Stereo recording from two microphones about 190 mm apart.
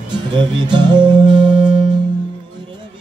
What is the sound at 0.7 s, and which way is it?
Music, 25° right (ahead or behind).